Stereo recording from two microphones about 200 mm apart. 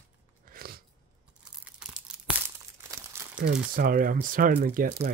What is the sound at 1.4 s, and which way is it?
Crunch, 5° right (ahead or behind).